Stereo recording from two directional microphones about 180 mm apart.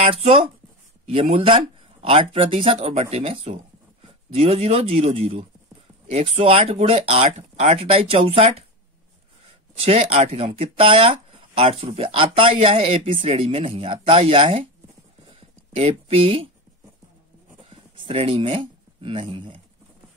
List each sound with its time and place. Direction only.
0.0 s speech: 35° right (ahead or behind)
9.8 s speech: 35° right (ahead or behind)
15.7 s speech: 35° right (ahead or behind)
17.6 s speech: 30° right (ahead or behind)